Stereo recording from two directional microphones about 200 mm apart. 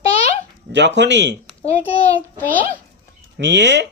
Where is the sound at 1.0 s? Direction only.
60° right (ahead or behind).